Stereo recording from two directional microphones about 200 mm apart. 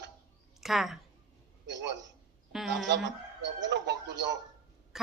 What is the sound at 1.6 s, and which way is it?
Speech, 60° right (ahead or behind).